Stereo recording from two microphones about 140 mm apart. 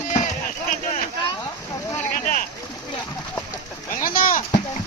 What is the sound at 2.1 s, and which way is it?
Boat, 75° left (ahead or behind).